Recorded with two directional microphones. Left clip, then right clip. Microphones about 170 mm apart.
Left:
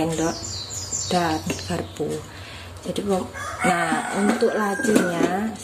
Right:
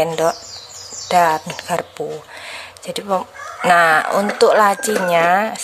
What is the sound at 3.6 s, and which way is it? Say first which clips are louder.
Speech: right 10 dB; 50° right (ahead or behind).